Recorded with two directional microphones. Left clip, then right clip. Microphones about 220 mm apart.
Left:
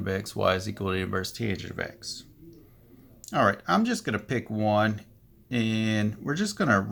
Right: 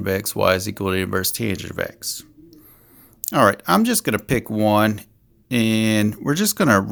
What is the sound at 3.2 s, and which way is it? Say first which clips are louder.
Speech: right 8 dB; 50° right (ahead or behind).